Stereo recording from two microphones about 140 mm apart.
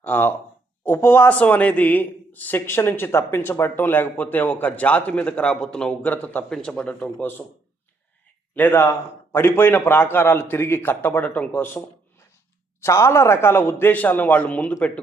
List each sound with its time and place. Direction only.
0.0 s a man's voice: 15° left (ahead or behind)
8.5 s a man's voice: 15° left (ahead or behind)
12.8 s a man's voice: 20° left (ahead or behind)